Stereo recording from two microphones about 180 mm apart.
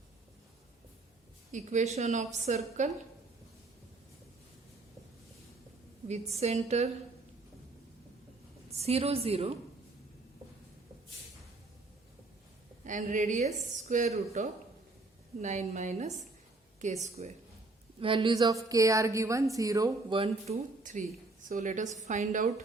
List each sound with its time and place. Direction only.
1.5 s a woman's voice: 40° right (ahead or behind)
6.3 s a woman's voice: 35° right (ahead or behind)
8.7 s a woman's voice: 35° right (ahead or behind)
12.8 s a woman's voice: 45° right (ahead or behind)
18.0 s a woman's voice: 25° right (ahead or behind)
20.1 s a woman's voice: 30° right (ahead or behind)
21.5 s a woman's voice: 45° right (ahead or behind)